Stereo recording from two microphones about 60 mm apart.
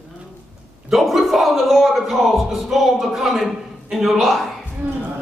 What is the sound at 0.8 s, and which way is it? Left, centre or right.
Speech, centre.